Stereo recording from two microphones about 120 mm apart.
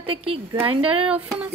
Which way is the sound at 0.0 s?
50° right (ahead or behind).